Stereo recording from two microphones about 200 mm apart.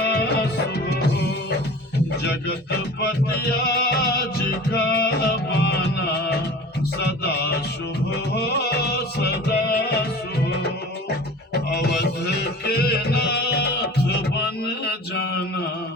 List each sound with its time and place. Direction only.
0.0 s music: 55° left (ahead or behind)
11.7 s music: 50° left (ahead or behind)
15.1 s mantra: 55° left (ahead or behind)